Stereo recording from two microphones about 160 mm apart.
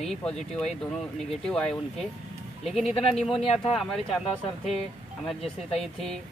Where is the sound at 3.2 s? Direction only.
40° left (ahead or behind).